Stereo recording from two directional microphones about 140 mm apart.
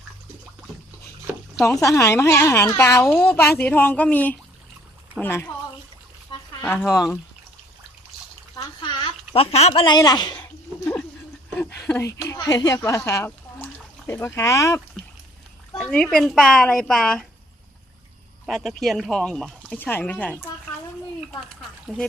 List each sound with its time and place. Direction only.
1.8 s a woman's voice: 20° left (ahead or behind)
6.8 s speech: 20° left (ahead or behind)
8.5 s a sound: 30° left (ahead or behind); by 9.8 s 50° left (ahead or behind)
9.8 s speech: 30° left (ahead or behind)
11.5 s a woman's voice: 15° left (ahead or behind)
15.8 s speech: 5° left (ahead or behind)
18.4 s speech: centre (ahead or behind)
21.9 s speech: centre (ahead or behind)